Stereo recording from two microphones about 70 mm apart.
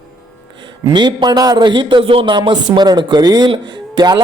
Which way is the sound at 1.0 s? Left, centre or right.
Right.